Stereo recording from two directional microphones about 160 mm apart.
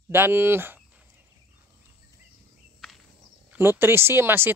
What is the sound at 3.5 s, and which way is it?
Speech, 15° right (ahead or behind).